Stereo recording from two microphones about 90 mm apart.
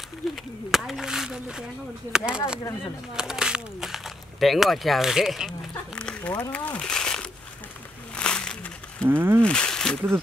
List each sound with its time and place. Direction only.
0.7 s speech: centre (ahead or behind)
5.9 s a sound: 15° left (ahead or behind)
6.5 s speech: 15° left (ahead or behind)
8.2 s a sound: 10° left (ahead or behind)
9.1 s speech: 25° right (ahead or behind)
9.4 s speech: 10° left (ahead or behind)